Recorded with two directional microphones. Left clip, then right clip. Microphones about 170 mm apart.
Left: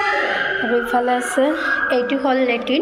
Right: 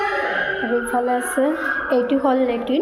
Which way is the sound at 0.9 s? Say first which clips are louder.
Left 2 dB; 10° right (ahead or behind).